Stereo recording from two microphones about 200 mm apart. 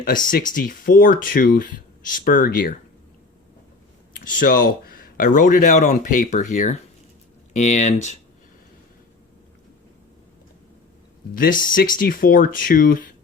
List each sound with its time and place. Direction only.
0.0 s speech: 45° left (ahead or behind)
4.3 s speech: 45° left (ahead or behind)
11.3 s speech: 45° left (ahead or behind)